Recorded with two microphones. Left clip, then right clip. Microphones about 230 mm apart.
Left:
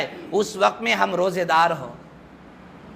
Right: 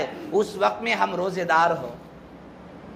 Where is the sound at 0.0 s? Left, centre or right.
Left.